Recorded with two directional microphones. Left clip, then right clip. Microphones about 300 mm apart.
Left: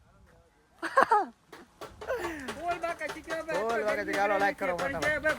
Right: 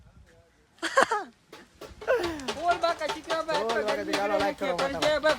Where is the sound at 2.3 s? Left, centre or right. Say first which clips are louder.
Right 6 dB; centre.